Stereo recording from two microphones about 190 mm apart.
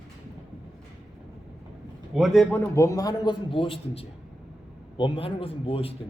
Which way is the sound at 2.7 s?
15° left (ahead or behind).